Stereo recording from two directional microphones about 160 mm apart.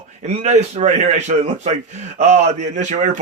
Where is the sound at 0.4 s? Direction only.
45° right (ahead or behind).